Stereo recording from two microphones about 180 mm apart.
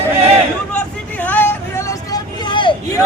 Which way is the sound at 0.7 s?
10° left (ahead or behind).